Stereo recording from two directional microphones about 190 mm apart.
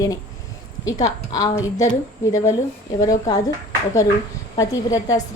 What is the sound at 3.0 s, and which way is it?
Speech, 20° left (ahead or behind).